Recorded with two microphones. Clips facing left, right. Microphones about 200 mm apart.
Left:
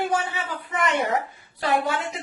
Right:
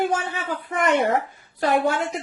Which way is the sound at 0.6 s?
55° right (ahead or behind).